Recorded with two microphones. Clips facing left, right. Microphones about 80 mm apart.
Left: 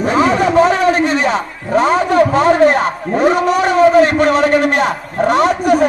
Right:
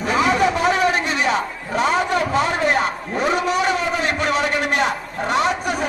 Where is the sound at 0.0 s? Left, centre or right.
Left.